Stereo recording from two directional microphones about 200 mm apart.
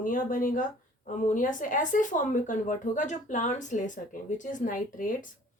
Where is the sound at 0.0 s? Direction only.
45° left (ahead or behind).